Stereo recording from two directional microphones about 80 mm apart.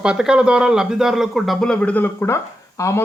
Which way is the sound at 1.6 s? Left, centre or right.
Centre.